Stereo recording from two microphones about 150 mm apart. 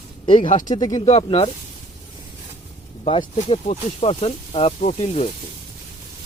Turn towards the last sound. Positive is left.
turn(degrees=40)  # may be behind; listen again after turning